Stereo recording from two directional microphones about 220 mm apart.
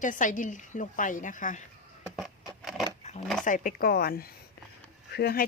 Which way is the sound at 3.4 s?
35° left (ahead or behind).